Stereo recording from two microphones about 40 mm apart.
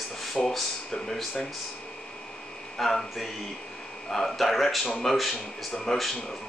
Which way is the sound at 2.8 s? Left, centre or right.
Centre.